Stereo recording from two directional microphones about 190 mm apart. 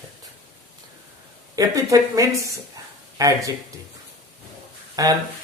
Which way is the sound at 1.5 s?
20° right (ahead or behind).